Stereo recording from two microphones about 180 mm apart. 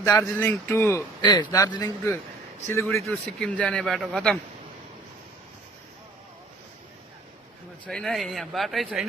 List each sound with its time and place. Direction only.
0.0 s speech: 15° left (ahead or behind)
1.2 s a man's voice: 25° left (ahead or behind)
2.9 s a man's voice: 5° left (ahead or behind)
7.9 s a man's voice: centre (ahead or behind)